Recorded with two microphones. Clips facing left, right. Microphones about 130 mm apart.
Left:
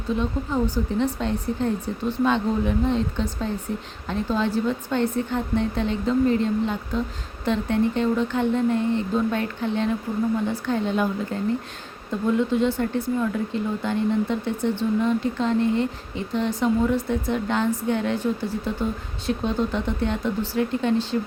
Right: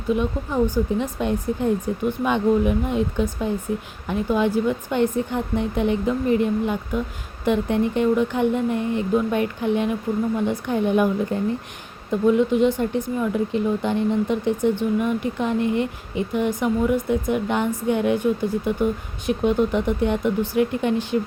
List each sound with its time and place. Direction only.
0.1 s speech: 15° right (ahead or behind)